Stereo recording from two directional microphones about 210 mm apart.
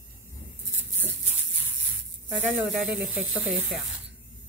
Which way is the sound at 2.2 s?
Centre (ahead or behind).